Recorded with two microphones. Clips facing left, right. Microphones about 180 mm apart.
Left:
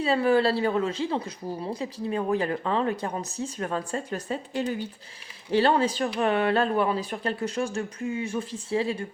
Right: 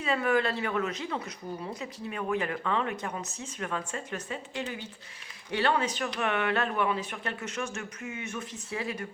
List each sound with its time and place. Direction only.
0.0 s speech: 30° left (ahead or behind)